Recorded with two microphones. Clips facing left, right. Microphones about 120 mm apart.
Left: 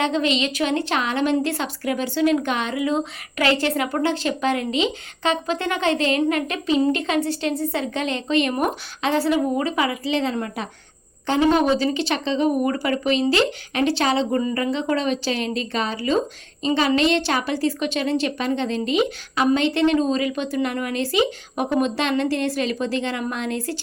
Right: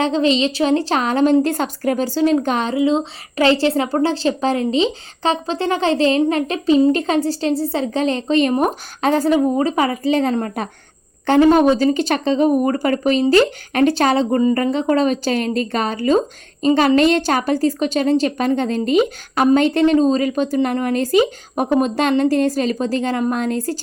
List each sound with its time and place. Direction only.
0.0 s a woman's voice: 35° right (ahead or behind)